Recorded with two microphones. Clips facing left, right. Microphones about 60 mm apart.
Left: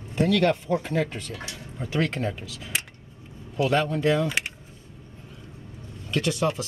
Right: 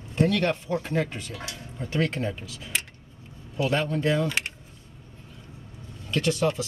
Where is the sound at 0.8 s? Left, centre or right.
Centre.